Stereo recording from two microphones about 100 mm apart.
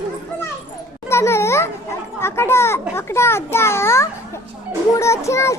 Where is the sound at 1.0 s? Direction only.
25° left (ahead or behind).